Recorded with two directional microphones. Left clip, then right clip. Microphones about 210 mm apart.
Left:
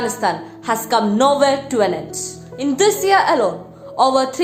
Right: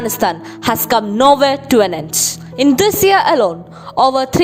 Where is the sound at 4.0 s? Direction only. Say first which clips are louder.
Right 3 dB; 40° right (ahead or behind).